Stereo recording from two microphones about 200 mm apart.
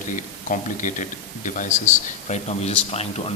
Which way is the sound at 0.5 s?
40° left (ahead or behind).